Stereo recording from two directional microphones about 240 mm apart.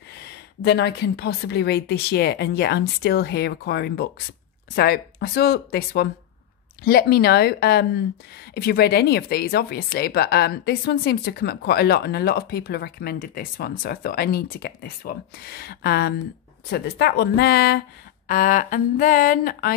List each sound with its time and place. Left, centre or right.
0.6 s speech: left